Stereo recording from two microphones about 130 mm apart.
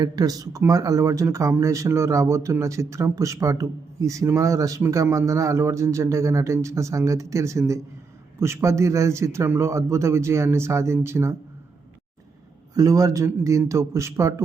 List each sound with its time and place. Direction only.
0.0 s speech: 30° right (ahead or behind)
12.7 s speech: 25° right (ahead or behind)